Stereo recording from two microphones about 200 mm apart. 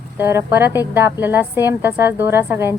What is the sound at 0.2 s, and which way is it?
A woman's voice, 10° right (ahead or behind).